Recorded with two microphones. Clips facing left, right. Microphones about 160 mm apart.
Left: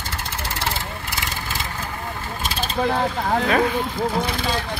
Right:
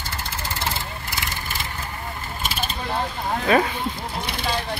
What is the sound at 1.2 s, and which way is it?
Vehicle, 90° left.